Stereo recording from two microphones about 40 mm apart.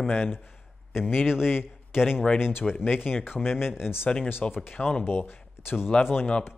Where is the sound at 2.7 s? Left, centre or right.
Left.